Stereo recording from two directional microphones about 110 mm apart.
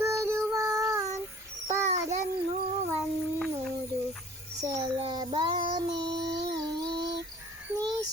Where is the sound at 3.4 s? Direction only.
5° left (ahead or behind).